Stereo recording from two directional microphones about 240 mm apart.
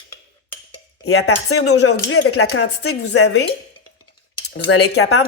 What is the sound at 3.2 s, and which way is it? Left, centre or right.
Speech, left.